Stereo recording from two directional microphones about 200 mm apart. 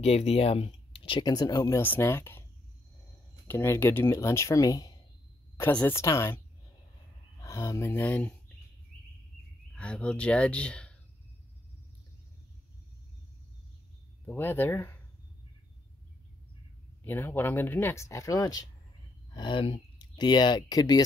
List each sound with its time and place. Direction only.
0.0 s speech: 30° left (ahead or behind); by 2.4 s 10° left (ahead or behind)
3.4 s speech: 10° left (ahead or behind)
7.4 s speech: 15° left (ahead or behind)
9.8 s speech: 5° left (ahead or behind)
14.2 s speech: 10° left (ahead or behind)
17.0 s speech: 10° left (ahead or behind)